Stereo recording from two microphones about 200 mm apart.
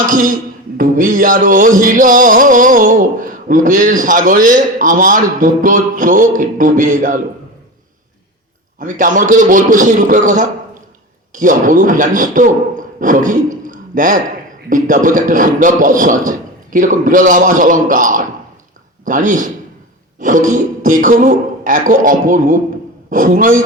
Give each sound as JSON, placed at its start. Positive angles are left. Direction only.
{"t": 0.0, "sound": "music", "side_deg": -40}
{"t": 8.8, "sound": "music", "side_deg": -40}
{"t": 11.3, "sound": "a man's voice", "side_deg": -40}
{"t": 14.7, "sound": "music", "side_deg": -40}
{"t": 23.0, "sound": "a man's voice", "side_deg": -40}